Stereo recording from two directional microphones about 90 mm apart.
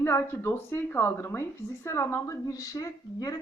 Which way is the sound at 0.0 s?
30° left (ahead or behind).